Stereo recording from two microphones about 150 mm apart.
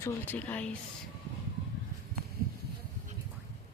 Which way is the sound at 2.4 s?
75° right (ahead or behind).